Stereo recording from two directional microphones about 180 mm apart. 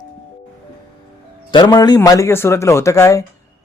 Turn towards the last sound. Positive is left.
turn(degrees=15)  # may be behind; listen again after turning